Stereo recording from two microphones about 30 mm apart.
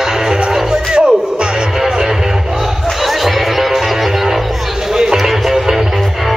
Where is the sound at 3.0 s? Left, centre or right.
Centre.